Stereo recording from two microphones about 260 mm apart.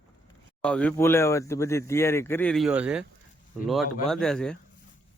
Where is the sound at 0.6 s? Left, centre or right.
Centre.